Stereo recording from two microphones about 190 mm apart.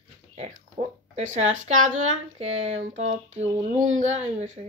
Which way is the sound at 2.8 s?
90° right.